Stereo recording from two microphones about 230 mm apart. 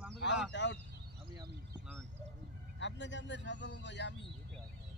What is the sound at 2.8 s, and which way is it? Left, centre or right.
Speech, left.